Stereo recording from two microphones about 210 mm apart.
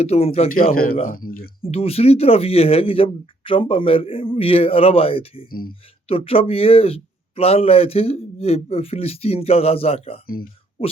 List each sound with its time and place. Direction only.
0.0 s speech: 30° left (ahead or behind)
0.7 s speech: 45° left (ahead or behind)
1.7 s speech: 30° left (ahead or behind)
5.5 s speech: 45° left (ahead or behind)
6.1 s speech: 25° left (ahead or behind)